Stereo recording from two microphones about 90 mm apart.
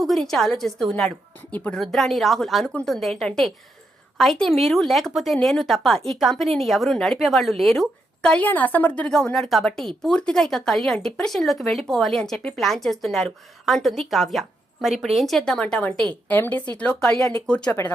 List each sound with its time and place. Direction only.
0.0 s speech: centre (ahead or behind)